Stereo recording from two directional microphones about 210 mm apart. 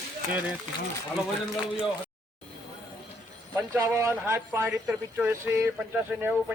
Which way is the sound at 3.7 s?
10° right (ahead or behind).